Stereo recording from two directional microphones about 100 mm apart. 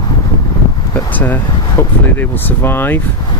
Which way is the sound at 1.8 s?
20° left (ahead or behind).